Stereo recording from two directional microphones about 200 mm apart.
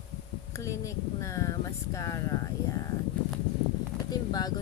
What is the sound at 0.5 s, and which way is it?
Speech, 15° left (ahead or behind).